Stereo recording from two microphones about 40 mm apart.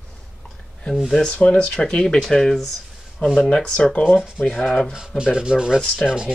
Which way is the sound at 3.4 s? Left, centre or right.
Left.